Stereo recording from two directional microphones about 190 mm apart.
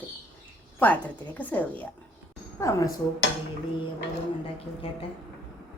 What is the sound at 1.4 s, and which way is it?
A woman's voice, 10° left (ahead or behind).